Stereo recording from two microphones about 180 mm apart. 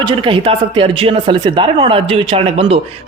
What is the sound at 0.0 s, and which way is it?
A woman's voice, 30° right (ahead or behind).